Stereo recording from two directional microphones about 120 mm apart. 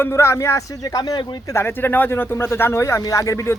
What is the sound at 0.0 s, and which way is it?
Speech, 20° left (ahead or behind).